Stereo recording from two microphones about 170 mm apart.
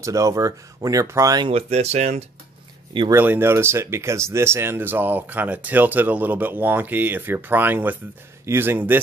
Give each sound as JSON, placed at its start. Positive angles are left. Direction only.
{"t": 0.0, "sound": "speech", "side_deg": -20}
{"t": 1.5, "sound": "speech", "side_deg": -40}
{"t": 2.9, "sound": "speech", "side_deg": -30}
{"t": 3.2, "sound": "speech", "side_deg": -15}